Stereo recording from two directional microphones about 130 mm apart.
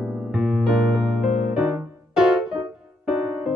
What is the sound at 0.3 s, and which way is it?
Music, 5° right (ahead or behind).